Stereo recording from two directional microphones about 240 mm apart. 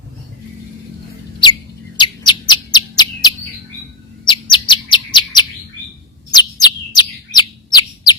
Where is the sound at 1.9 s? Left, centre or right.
Centre.